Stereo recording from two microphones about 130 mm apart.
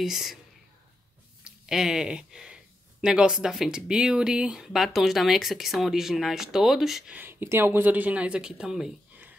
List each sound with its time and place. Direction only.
0.0 s speech: centre (ahead or behind)
1.4 s speech: 5° right (ahead or behind)
7.2 s speech: 15° right (ahead or behind)